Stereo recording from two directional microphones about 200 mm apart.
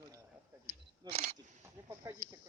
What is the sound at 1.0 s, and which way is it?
Wild animals, 20° right (ahead or behind).